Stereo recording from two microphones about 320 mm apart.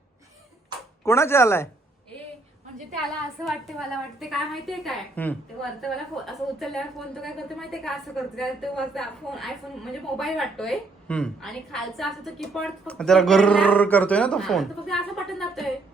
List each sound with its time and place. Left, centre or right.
1.0 s speech: centre
3.4 s a woman's voice: centre